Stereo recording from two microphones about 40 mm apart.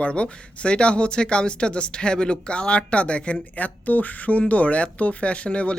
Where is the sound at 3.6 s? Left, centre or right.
Left.